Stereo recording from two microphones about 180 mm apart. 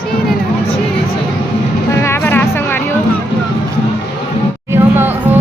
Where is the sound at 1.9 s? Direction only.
15° left (ahead or behind).